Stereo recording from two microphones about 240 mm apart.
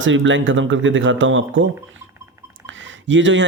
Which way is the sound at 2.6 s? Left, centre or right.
Right.